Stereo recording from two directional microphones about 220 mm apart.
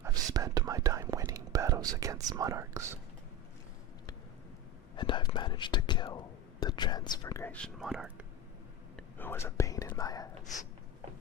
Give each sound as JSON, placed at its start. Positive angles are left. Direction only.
{"t": 0.0, "sound": "whispering", "side_deg": -15}
{"t": 4.9, "sound": "speech", "side_deg": 20}
{"t": 9.1, "sound": "speech", "side_deg": 10}